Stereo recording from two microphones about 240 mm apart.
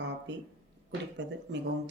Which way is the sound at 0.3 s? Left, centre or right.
Right.